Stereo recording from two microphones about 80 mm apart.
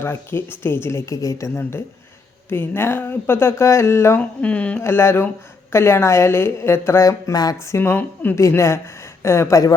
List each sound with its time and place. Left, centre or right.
0.0 s speech: left
2.5 s speech: left
4.2 s speech: centre
4.8 s a woman's voice: left
8.4 s speech: left